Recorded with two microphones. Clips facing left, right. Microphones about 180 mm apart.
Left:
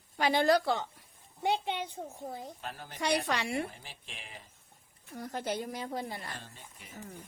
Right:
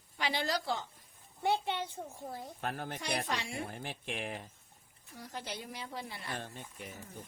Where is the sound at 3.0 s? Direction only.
70° left (ahead or behind).